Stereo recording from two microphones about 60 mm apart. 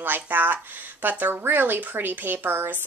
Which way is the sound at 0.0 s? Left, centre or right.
Right.